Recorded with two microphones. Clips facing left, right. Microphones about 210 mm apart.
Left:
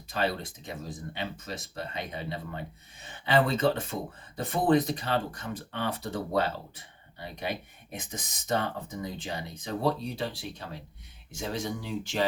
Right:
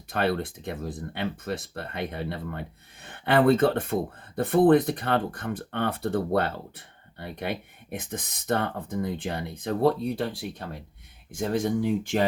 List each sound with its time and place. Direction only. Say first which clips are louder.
0.1 s speech: right 4 dB; 60° right (ahead or behind)